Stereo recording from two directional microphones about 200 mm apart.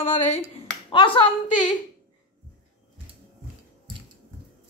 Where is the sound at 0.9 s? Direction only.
25° left (ahead or behind).